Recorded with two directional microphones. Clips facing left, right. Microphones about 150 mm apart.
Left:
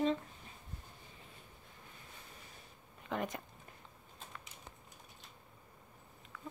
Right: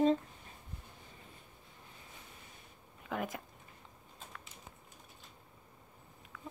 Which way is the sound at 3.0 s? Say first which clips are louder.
Even; 5° right (ahead or behind).